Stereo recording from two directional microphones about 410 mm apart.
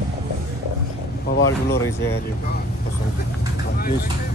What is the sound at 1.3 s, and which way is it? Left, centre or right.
Speech, left.